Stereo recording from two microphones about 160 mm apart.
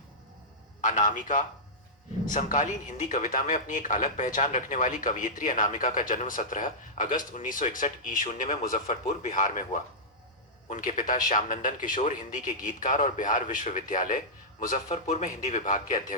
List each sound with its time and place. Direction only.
0.8 s speech: 50° left (ahead or behind)
10.7 s a man's voice: 55° left (ahead or behind)